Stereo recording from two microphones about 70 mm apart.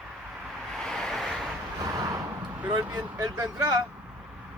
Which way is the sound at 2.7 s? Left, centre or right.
Right.